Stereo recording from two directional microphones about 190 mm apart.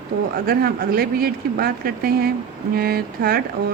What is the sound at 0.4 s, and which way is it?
Speech, 55° right (ahead or behind).